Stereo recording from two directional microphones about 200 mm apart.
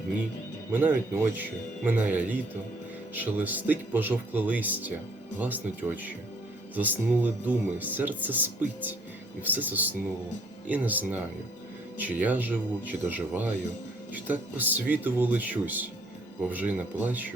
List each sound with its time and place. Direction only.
0.7 s speech: 10° right (ahead or behind)
6.7 s speech: 10° right (ahead or behind)